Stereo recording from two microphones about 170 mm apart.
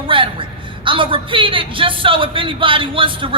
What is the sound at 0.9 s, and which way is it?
Speech, 30° right (ahead or behind).